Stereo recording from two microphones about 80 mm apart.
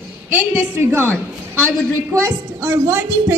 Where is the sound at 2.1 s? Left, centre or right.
Right.